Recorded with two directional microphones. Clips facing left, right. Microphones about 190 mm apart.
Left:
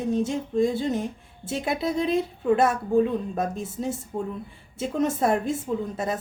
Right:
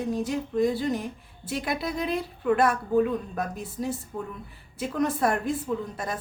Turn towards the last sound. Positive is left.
turn(degrees=25)  # may be behind; listen again after turning